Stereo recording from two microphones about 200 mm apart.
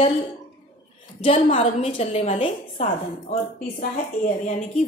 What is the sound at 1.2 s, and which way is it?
A woman's voice, 30° left (ahead or behind).